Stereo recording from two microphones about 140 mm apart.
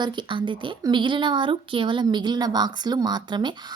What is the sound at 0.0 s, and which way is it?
A woman's voice, 35° right (ahead or behind).